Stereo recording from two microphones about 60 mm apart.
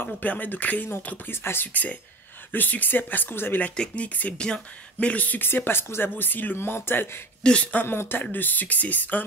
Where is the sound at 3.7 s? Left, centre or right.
Centre; by 7.1 s left.